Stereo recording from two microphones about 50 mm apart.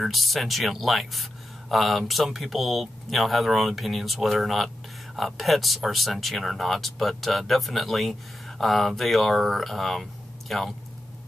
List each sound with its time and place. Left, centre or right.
0.0 s speech: centre